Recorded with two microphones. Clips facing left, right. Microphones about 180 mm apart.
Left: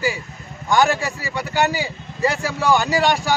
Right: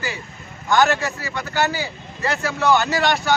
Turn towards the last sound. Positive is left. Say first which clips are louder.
# left 2 dB
turn(degrees=10)  # may be behind; listen again after turning